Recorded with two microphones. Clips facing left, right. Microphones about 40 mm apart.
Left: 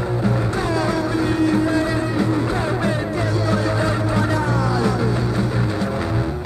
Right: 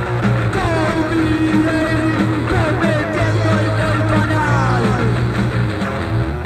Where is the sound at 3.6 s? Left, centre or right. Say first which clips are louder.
Right 3 dB; right.